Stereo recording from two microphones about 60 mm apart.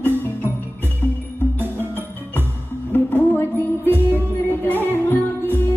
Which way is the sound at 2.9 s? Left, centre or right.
Left.